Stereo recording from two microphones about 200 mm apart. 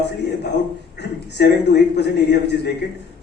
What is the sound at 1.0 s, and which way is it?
A man's voice, 60° left (ahead or behind).